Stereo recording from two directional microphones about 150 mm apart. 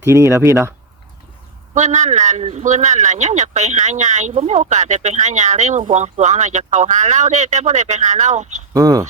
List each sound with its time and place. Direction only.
0.0 s speech: 20° right (ahead or behind)
1.7 s speech: 55° right (ahead or behind)
8.7 s speech: 25° right (ahead or behind)